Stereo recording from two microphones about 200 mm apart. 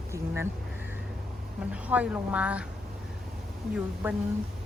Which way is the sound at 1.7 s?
5° right (ahead or behind).